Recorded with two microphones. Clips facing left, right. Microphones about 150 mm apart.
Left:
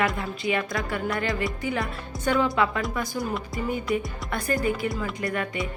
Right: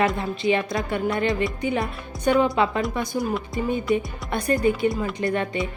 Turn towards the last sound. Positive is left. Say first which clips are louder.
# right 4 dB
turn(degrees=-25)  # may be behind; listen again after turning